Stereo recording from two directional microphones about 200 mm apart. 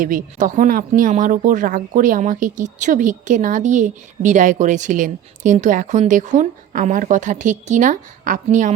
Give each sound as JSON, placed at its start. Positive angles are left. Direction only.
{"t": 0.0, "sound": "speech", "side_deg": -45}